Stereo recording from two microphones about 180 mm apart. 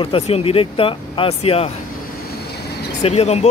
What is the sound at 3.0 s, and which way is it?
Speech, 35° left (ahead or behind).